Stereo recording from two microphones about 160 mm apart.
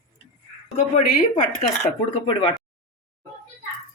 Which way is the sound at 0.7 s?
50° left (ahead or behind).